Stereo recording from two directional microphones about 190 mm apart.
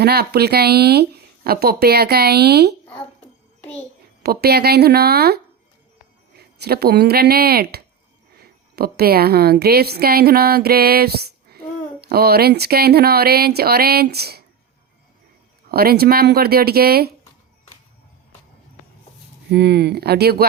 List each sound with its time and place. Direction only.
0.0 s speech: 55° right (ahead or behind)
3.6 s a sound: 5° left (ahead or behind)
4.2 s a woman's voice: 55° right (ahead or behind)
15.7 s speech: 55° right (ahead or behind)
19.5 s speech: 60° right (ahead or behind)